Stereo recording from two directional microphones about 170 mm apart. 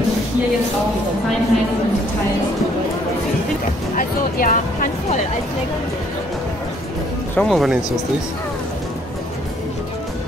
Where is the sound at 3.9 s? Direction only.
55° left (ahead or behind).